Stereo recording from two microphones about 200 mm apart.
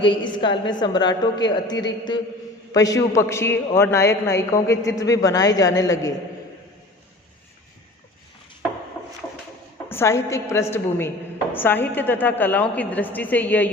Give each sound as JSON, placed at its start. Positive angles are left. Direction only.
{"t": 0.0, "sound": "a man's voice", "side_deg": 25}
{"t": 9.9, "sound": "a man's voice", "side_deg": 10}